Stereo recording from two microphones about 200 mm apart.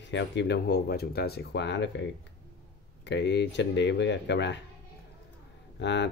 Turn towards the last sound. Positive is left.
turn(degrees=60)  # may be behind; listen again after turning